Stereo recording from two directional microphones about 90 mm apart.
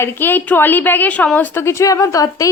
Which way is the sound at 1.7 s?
35° left (ahead or behind).